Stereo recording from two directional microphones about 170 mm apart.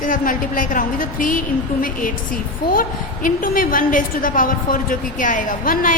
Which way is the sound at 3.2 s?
55° left (ahead or behind).